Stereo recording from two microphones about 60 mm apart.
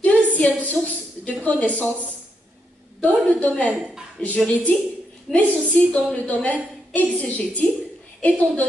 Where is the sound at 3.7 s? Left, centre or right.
Centre.